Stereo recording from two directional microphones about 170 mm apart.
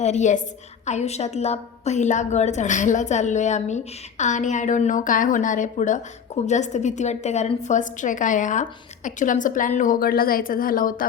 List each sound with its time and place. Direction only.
0.0 s a woman's voice: 45° left (ahead or behind)